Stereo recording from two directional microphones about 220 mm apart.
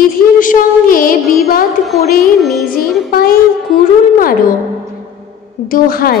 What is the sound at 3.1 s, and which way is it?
A woman's voice, 45° left (ahead or behind).